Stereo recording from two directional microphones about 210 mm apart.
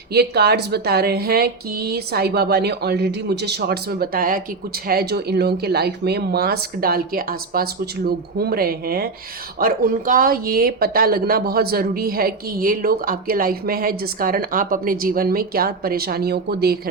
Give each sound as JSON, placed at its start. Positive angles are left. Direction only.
{"t": 0.1, "sound": "speech", "side_deg": -50}